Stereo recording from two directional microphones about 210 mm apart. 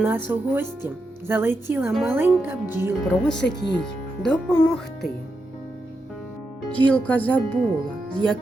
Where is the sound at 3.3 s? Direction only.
55° left (ahead or behind).